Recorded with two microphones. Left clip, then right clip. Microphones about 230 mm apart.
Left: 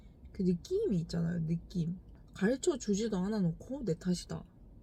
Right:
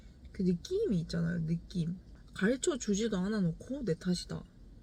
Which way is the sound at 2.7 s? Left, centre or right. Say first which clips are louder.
Right 1 dB; left.